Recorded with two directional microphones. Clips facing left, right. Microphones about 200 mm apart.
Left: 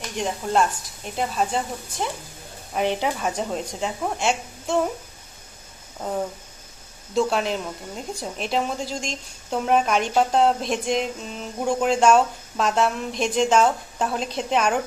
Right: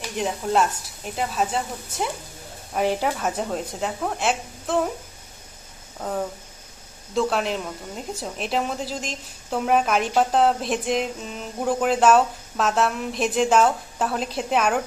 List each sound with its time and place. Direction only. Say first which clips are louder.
0.0 s a woman's voice: right 1 dB; 5° right (ahead or behind)
6.0 s a sound: even; 10° left (ahead or behind)
7.2 s a woman's voice: left 1 dB; centre (ahead or behind)